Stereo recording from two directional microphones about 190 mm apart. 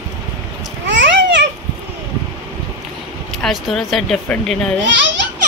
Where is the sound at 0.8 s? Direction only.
70° right (ahead or behind).